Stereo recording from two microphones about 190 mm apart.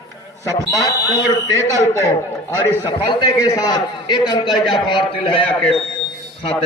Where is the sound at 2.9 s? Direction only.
25° left (ahead or behind).